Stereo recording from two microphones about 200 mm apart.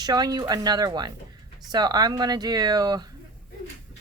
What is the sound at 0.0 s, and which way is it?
Speech, 20° right (ahead or behind).